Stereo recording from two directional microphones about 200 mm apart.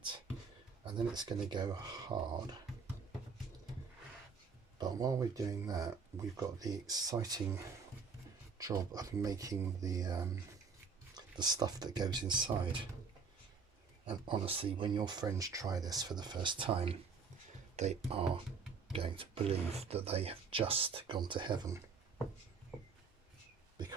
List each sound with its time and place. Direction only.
0.9 s speech: 20° right (ahead or behind)
4.8 s speech: 20° right (ahead or behind)
14.0 s speech: 25° right (ahead or behind)